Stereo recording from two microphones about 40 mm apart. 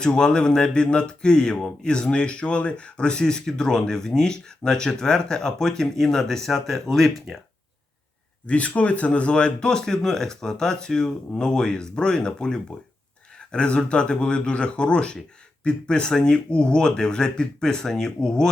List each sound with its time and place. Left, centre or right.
0.0 s speech: centre
8.4 s speech: left; by 18.4 s centre